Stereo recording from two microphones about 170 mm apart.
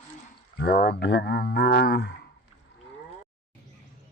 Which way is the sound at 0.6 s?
65° left (ahead or behind).